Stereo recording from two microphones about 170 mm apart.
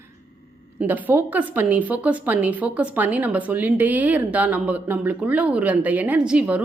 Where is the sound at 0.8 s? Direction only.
10° right (ahead or behind).